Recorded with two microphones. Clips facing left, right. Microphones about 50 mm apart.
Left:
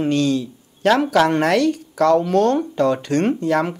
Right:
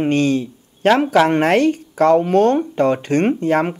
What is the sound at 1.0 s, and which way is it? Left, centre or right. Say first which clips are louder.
Speech: right 2 dB; centre.